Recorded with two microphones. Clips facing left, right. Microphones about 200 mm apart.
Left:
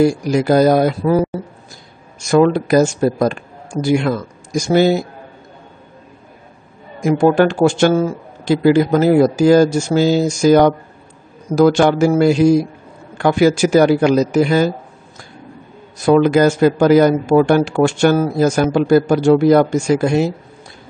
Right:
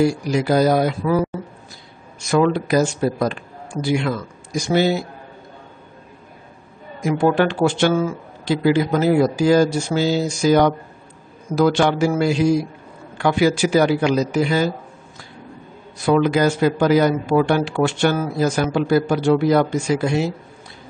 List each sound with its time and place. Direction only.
0.0 s speech: 45° left (ahead or behind)
2.1 s speech: 45° left (ahead or behind)
7.1 s speech: 45° left (ahead or behind)
16.1 s speech: 50° left (ahead or behind)